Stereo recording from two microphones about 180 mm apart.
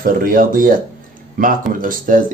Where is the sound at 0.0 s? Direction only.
50° right (ahead or behind).